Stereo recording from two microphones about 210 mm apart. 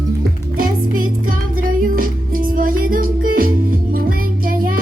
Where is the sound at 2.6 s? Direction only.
40° right (ahead or behind).